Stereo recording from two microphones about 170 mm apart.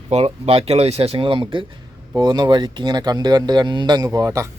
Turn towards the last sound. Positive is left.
turn(degrees=-20)  # may be behind; listen again after turning